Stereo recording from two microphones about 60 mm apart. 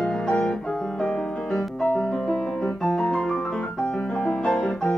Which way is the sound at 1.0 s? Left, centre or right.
Centre.